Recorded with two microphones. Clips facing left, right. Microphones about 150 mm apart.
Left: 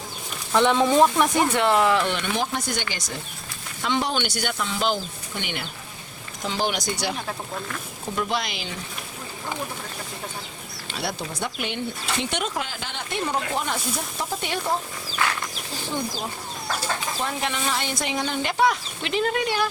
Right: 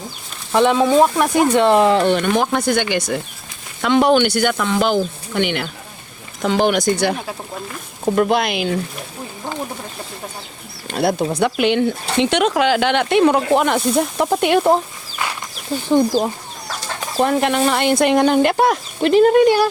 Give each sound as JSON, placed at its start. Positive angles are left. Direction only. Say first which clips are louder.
{"t": 0.5, "sound": "speech", "louder": "right 5 dB", "side_deg": -10}
{"t": 2.0, "sound": "speech", "louder": "right 9 dB", "side_deg": -45}
{"t": 6.4, "sound": "speech", "louder": "right 10 dB", "side_deg": -60}
{"t": 10.8, "sound": "speech", "louder": "right 12 dB", "side_deg": -55}
{"t": 17.2, "sound": "speech", "louder": "right 12 dB", "side_deg": -60}